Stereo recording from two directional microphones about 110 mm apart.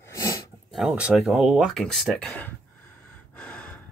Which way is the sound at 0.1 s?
30° left (ahead or behind).